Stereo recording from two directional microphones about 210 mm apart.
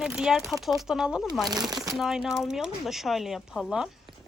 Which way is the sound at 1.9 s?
Centre (ahead or behind).